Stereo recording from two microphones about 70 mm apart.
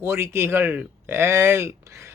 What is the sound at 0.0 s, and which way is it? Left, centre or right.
A man's voice, right.